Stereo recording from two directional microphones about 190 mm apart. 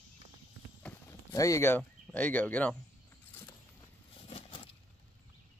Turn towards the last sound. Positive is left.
turn(degrees=25)  # may be behind; listen again after turning